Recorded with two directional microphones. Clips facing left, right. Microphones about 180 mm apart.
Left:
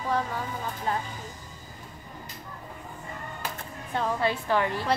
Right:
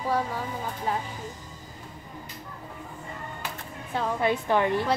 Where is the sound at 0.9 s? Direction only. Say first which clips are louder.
Even; 10° right (ahead or behind).